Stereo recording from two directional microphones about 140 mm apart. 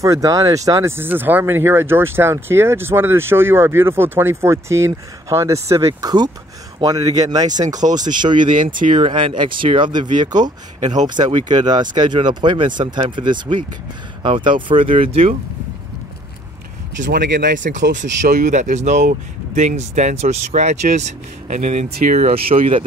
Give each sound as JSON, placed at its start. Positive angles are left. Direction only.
{"t": 0.0, "sound": "speech", "side_deg": -25}
{"t": 7.8, "sound": "speech", "side_deg": -45}
{"t": 8.2, "sound": "speech", "side_deg": -35}
{"t": 8.5, "sound": "speech", "side_deg": -70}
{"t": 9.0, "sound": "speech", "side_deg": -35}
{"t": 17.1, "sound": "speech", "side_deg": -80}
{"t": 22.5, "sound": "speech", "side_deg": -45}